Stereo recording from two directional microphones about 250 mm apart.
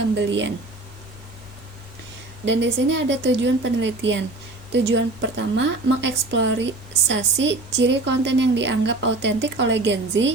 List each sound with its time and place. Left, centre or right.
0.3 s a woman's voice: right
2.4 s a woman's voice: right